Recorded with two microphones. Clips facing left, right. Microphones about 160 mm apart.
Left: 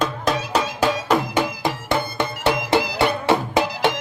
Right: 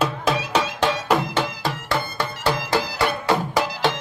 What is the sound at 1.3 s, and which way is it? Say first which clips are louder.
Music: left 3 dB; 15° left (ahead or behind).